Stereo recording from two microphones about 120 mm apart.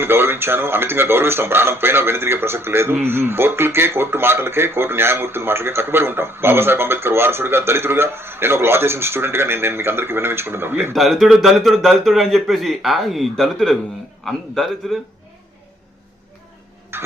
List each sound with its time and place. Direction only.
0.0 s speech: 20° right (ahead or behind)
10.9 s a man's voice: centre (ahead or behind)
16.9 s a sound: 20° right (ahead or behind)